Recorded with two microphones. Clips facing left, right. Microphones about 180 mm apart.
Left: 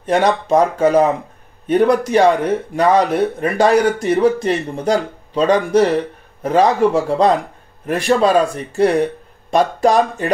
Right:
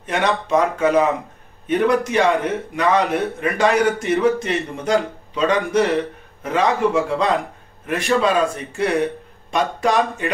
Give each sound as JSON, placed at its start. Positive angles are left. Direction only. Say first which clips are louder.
{"t": 0.0, "sound": "speech", "louder": "left 5 dB", "side_deg": 35}